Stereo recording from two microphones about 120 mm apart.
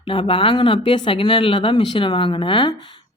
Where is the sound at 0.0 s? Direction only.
45° left (ahead or behind).